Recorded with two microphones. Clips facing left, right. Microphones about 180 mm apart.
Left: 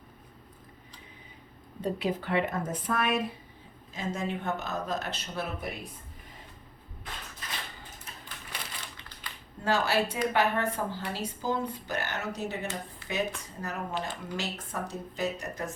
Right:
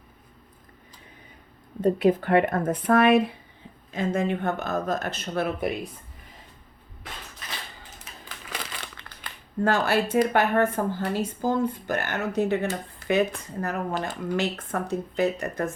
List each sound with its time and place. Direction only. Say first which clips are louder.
1.8 s speech: right 10 dB; 50° right (ahead or behind)
8.2 s crushing: right 7 dB; 90° right
9.6 s speech: right 4 dB; 50° right (ahead or behind)